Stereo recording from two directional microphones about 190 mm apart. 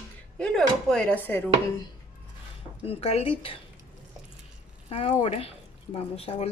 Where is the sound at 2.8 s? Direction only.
30° left (ahead or behind).